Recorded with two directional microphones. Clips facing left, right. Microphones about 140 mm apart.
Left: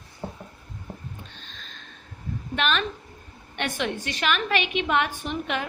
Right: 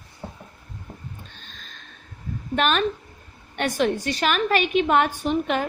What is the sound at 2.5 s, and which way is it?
A woman's voice, 45° right (ahead or behind).